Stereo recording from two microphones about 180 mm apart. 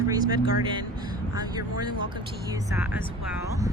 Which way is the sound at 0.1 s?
20° right (ahead or behind).